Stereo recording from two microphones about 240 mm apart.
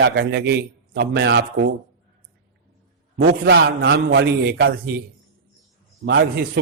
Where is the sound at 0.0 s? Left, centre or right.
Right.